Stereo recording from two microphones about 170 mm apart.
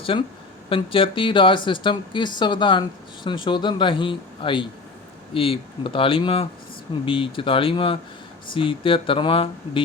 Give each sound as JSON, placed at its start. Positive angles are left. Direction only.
{"t": 0.0, "sound": "speech", "side_deg": 30}